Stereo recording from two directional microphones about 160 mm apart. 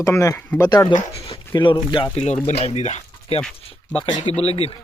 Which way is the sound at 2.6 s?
40° left (ahead or behind).